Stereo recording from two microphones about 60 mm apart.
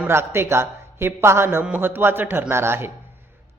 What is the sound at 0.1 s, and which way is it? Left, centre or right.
A man's voice, right.